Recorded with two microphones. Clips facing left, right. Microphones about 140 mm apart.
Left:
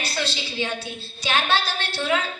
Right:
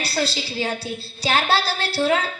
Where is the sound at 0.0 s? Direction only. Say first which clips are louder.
Right 4 dB; 35° right (ahead or behind).